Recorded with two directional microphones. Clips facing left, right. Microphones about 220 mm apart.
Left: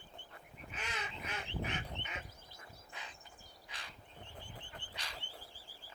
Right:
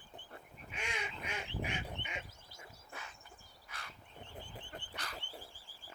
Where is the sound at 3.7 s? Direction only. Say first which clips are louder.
Right 2 dB; 15° left (ahead or behind).